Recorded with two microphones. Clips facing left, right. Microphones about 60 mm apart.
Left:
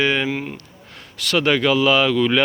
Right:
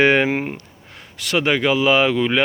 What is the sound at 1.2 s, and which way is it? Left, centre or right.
Speech, centre.